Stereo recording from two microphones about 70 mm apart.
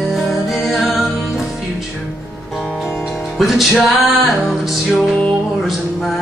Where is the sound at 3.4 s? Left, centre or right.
Centre.